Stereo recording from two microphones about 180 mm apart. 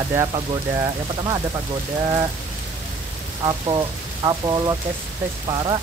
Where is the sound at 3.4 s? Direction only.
25° right (ahead or behind).